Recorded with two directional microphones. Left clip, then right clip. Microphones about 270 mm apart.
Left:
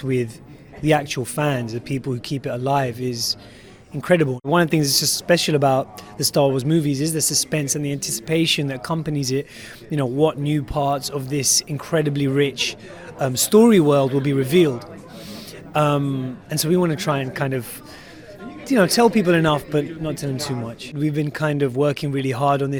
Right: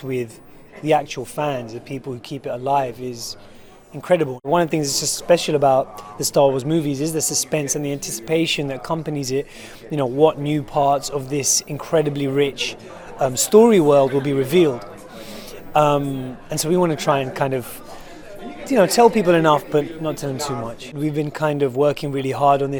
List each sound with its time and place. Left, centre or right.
0.0 s speech: left